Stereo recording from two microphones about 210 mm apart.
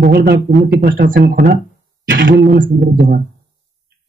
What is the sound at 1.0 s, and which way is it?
Speech, 40° right (ahead or behind).